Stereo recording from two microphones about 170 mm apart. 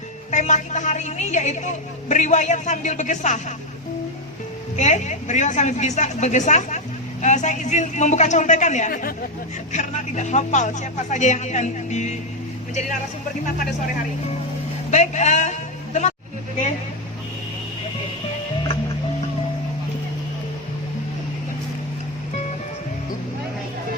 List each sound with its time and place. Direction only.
0.3 s a woman's voice: 45° left (ahead or behind)
4.8 s a woman's voice: 45° left (ahead or behind)
9.7 s a woman's voice: 45° left (ahead or behind)
14.8 s a man's voice: 45° left (ahead or behind)